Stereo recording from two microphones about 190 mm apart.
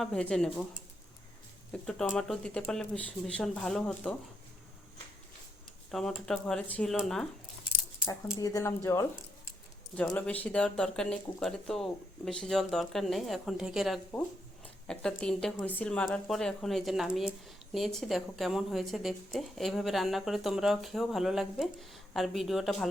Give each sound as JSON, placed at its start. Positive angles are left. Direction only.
{"t": 0.0, "sound": "speech", "side_deg": 5}
{"t": 5.9, "sound": "speech", "side_deg": 0}
{"t": 8.4, "sound": "speech", "side_deg": 20}
{"t": 10.2, "sound": "speech", "side_deg": 5}